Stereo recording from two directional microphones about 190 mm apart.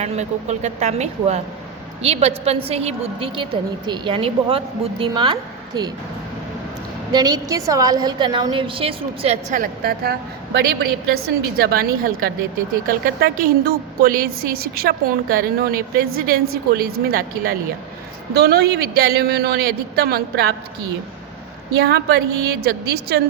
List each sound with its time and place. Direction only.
0.0 s a woman's voice: 35° right (ahead or behind)
7.1 s a woman's voice: 20° right (ahead or behind)
9.8 s a woman's voice: 55° right (ahead or behind)
21.8 s a woman's voice: 60° right (ahead or behind)